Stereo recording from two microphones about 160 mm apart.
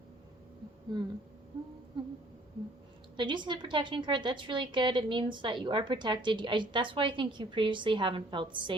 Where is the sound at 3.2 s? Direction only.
30° right (ahead or behind).